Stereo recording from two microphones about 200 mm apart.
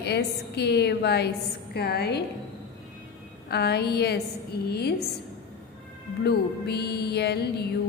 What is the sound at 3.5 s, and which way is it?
A woman's voice, 55° left (ahead or behind).